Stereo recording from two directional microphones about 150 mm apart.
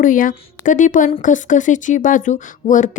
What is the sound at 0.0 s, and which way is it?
Speech, 65° left (ahead or behind).